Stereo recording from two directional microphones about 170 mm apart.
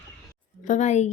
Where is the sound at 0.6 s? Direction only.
45° left (ahead or behind).